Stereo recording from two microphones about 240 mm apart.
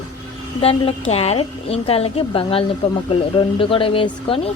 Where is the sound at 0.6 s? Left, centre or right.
Left.